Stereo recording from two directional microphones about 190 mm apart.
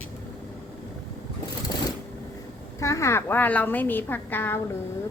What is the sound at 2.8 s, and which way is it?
A woman's voice, 15° left (ahead or behind).